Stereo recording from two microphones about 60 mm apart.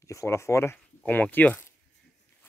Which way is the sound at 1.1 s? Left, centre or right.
Left.